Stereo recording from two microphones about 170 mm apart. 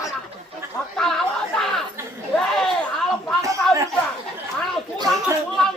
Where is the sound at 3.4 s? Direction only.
20° right (ahead or behind).